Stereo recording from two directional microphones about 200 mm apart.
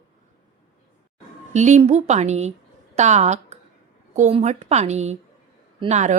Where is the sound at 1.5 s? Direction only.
35° right (ahead or behind).